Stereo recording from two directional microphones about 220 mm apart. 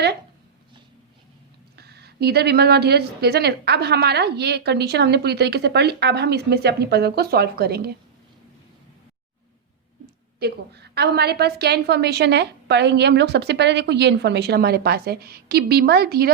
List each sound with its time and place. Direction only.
1.7 s a woman's voice: 45° right (ahead or behind)
10.4 s a woman's voice: 50° right (ahead or behind)